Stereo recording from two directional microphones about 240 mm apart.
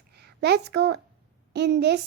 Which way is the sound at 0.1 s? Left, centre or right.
Right.